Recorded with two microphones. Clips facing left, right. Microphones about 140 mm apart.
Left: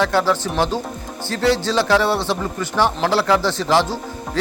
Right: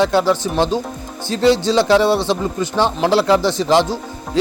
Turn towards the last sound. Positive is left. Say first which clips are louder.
# right 2 dB
turn(degrees=-15)  # may be behind; listen again after turning